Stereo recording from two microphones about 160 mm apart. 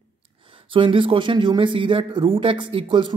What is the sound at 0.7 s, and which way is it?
Speech, 30° right (ahead or behind).